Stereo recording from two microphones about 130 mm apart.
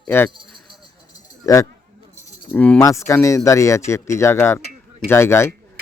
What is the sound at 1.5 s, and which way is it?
Speech, 25° left (ahead or behind).